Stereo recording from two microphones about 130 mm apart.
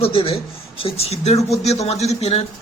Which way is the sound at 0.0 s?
45° left (ahead or behind).